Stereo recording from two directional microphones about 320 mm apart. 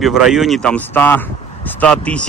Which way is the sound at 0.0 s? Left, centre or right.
Centre.